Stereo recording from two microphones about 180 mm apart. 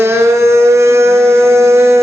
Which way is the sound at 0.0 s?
15° right (ahead or behind).